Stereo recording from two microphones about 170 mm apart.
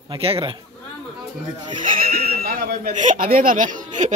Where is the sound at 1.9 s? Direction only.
60° right (ahead or behind).